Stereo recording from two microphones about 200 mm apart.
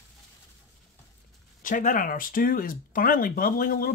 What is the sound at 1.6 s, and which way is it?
Speech, 40° left (ahead or behind).